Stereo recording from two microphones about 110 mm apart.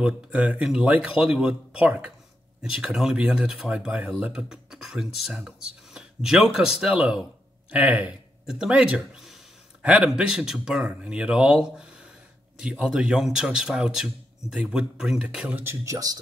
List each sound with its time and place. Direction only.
0.0 s speech: 10° right (ahead or behind)
15.6 s speech: 25° right (ahead or behind)